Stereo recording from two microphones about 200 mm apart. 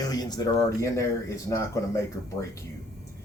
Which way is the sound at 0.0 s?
20° left (ahead or behind).